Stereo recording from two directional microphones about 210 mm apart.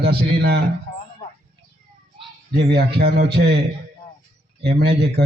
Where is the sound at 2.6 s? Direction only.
50° right (ahead or behind).